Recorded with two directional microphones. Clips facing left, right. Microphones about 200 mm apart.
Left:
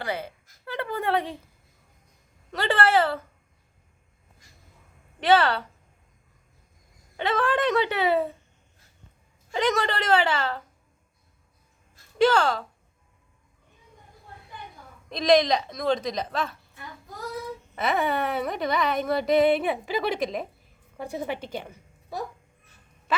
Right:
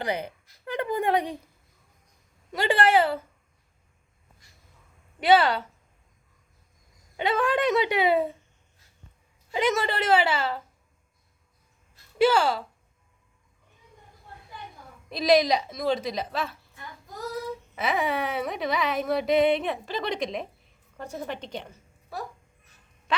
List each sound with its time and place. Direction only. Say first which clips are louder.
0.0 s a woman's voice: right 2 dB; 15° right (ahead or behind)
2.5 s a woman's voice: right 1 dB; 10° right (ahead or behind)
5.2 s a woman's voice: right 1 dB; 10° right (ahead or behind)
7.2 s a woman's voice: even; 10° right (ahead or behind)
9.5 s a woman's voice: even; 10° right (ahead or behind)
12.2 s a woman's voice: even; 10° right (ahead or behind)
15.1 s carnatic music: left 1 dB; 5° right (ahead or behind)
17.7 s carnatic music: left 2 dB; centre (ahead or behind)
21.0 s a woman's voice: left 3 dB; 10° left (ahead or behind)